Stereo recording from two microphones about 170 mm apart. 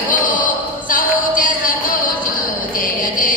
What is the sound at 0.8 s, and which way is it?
Music, 55° left (ahead or behind).